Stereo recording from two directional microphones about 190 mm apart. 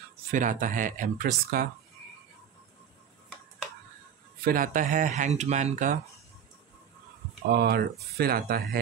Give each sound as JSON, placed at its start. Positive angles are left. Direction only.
{"t": 0.3, "sound": "speech", "side_deg": -45}
{"t": 4.5, "sound": "speech", "side_deg": -45}
{"t": 7.4, "sound": "speech", "side_deg": -55}